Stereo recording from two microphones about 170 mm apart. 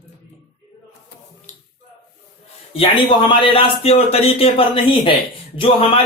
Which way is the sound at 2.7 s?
30° left (ahead or behind).